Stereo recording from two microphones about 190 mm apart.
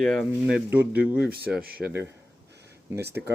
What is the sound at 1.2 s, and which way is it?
Speech, 55° right (ahead or behind).